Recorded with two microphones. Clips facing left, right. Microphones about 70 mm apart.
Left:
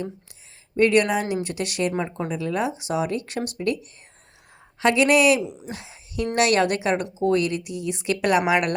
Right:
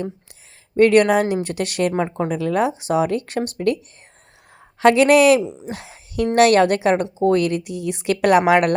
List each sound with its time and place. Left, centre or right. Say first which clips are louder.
0.8 s speech: right 5 dB; right
5.4 s speech: right 4 dB; right
5.7 s speech: right 5 dB; right